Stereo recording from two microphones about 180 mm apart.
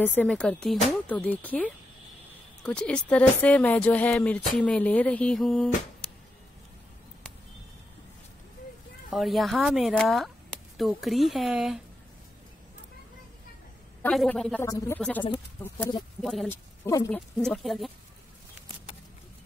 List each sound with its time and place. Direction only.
0.0 s speech: 10° left (ahead or behind)
9.1 s speech: centre (ahead or behind)
14.0 s speech: 5° left (ahead or behind)
16.4 s speech: 15° left (ahead or behind)
17.1 s speech: 5° left (ahead or behind)